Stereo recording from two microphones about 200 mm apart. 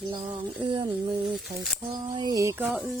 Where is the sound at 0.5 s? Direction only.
25° right (ahead or behind).